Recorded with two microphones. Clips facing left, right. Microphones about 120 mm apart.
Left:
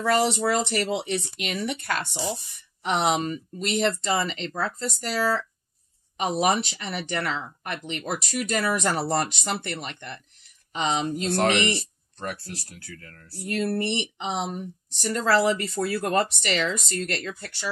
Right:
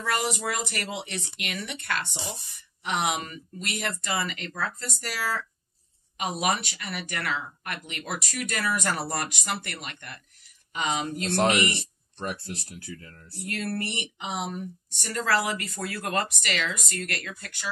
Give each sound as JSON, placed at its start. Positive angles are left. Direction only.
{"t": 0.0, "sound": "speech", "side_deg": 35}
{"t": 11.2, "sound": "speech", "side_deg": -20}
{"t": 13.5, "sound": "speech", "side_deg": 20}